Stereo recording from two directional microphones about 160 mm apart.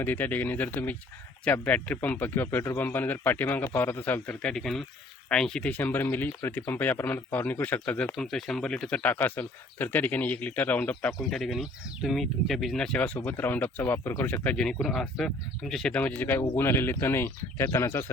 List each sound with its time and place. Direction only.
0.0 s speech: 10° left (ahead or behind)